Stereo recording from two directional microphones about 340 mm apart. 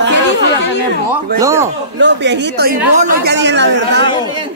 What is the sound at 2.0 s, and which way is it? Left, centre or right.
A man's voice, right.